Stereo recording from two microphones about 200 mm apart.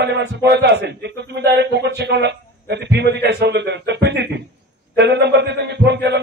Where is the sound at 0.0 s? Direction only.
60° right (ahead or behind).